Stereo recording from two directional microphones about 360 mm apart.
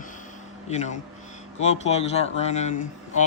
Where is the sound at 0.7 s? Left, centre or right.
Centre.